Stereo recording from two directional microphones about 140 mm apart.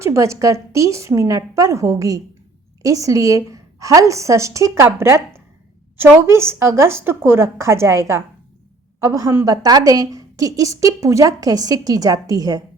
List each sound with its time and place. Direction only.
0.0 s a woman's voice: 20° right (ahead or behind)